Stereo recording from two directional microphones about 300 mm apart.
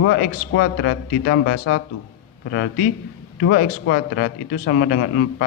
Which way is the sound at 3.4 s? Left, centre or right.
Left.